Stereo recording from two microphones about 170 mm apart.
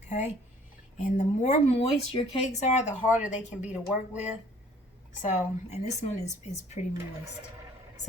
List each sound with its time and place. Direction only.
0.1 s speech: 45° left (ahead or behind)
3.1 s speech: 10° right (ahead or behind)
5.2 s speech: 45° left (ahead or behind)